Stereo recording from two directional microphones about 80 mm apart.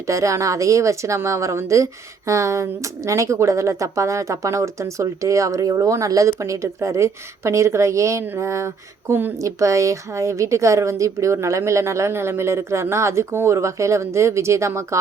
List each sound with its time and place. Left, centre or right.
0.1 s a woman's voice: right
9.4 s a woman's voice: right